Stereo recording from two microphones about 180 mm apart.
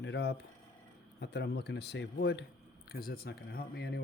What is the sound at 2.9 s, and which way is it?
Speech, 55° left (ahead or behind).